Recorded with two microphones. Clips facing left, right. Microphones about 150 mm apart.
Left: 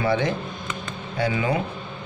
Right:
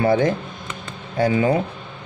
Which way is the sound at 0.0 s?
50° right (ahead or behind).